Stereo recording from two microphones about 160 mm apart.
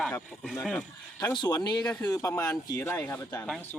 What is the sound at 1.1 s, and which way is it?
Speech, 25° left (ahead or behind).